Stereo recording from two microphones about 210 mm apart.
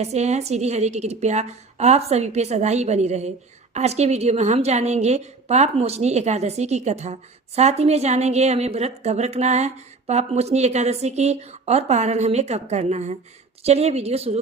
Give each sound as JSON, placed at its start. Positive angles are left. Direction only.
{"t": 0.0, "sound": "a woman's voice", "side_deg": -30}